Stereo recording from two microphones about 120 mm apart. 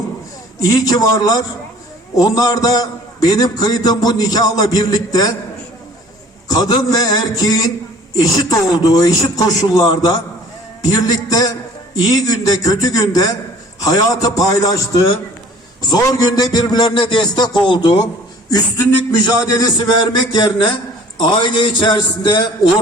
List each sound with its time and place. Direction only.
0.6 s a man's voice: 30° left (ahead or behind)
6.5 s a man's voice: 35° left (ahead or behind)
19.1 s a man's voice: 30° left (ahead or behind)
20.3 s a man's voice: 40° left (ahead or behind)